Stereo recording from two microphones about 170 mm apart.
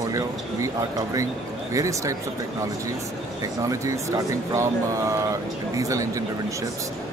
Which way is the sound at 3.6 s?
20° right (ahead or behind).